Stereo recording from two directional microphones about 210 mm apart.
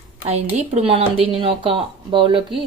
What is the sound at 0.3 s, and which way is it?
Speech, 30° right (ahead or behind).